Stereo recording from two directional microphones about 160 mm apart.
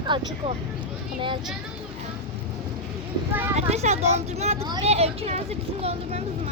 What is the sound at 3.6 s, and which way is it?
Speech, 45° right (ahead or behind).